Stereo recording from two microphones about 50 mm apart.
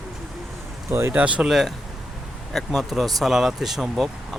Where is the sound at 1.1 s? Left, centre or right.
Right.